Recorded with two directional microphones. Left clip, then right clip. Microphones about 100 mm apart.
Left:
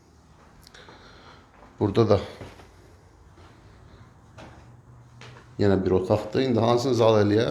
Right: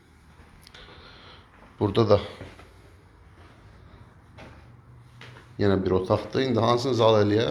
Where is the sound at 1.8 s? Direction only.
45° left (ahead or behind).